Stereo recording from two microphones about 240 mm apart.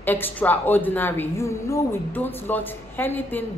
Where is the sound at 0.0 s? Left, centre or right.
Centre.